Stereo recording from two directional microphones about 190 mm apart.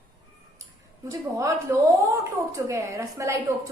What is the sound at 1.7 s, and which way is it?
A woman's voice, 15° right (ahead or behind).